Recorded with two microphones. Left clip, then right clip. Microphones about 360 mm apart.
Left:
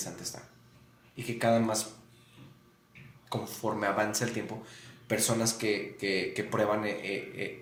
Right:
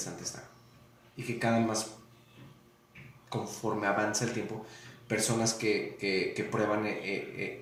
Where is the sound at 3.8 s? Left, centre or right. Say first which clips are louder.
Even; left.